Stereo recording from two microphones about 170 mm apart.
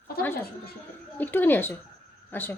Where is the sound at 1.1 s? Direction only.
10° left (ahead or behind).